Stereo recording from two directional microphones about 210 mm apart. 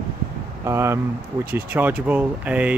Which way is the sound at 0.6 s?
15° right (ahead or behind).